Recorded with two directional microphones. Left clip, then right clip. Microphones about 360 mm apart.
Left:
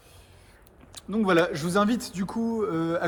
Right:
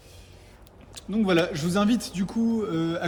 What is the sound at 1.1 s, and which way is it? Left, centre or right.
Speech, centre.